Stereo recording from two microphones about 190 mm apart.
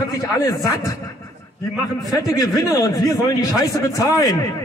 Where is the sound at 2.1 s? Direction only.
20° left (ahead or behind).